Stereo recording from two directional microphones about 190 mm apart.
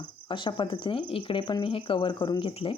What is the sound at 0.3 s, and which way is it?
Speech, 25° left (ahead or behind).